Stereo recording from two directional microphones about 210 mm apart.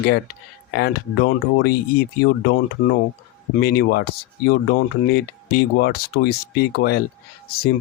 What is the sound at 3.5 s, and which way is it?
Speech, 45° left (ahead or behind).